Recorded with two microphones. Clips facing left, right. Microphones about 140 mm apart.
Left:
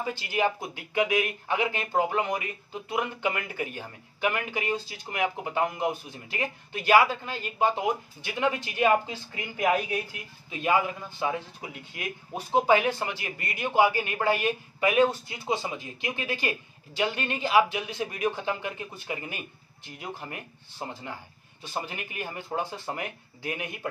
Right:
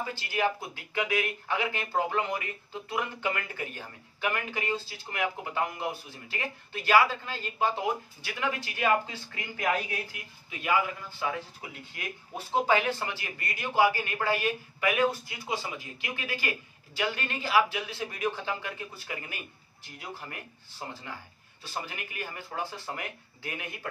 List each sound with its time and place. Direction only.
0.1 s speech: 20° left (ahead or behind)